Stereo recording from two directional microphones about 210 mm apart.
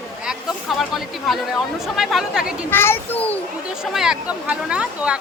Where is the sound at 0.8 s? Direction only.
Centre (ahead or behind).